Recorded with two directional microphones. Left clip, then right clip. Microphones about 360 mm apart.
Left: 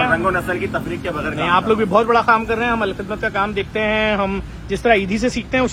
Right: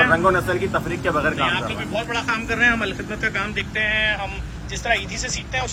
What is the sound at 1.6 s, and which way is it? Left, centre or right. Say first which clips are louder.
Speech: left 11 dB; centre.